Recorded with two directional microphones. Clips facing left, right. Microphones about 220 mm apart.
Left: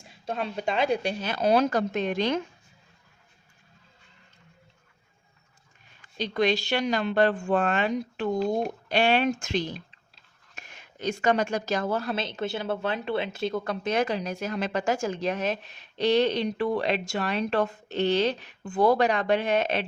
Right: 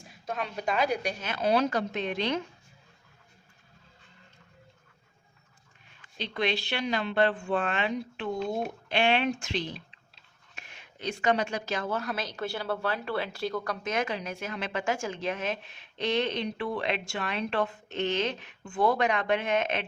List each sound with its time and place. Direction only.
0.1 s speech: 30° left (ahead or behind); by 2.4 s 45° left (ahead or behind)
6.1 s speech: 40° left (ahead or behind)
10.6 s whispering: 40° left (ahead or behind)
11.0 s speech: 45° left (ahead or behind)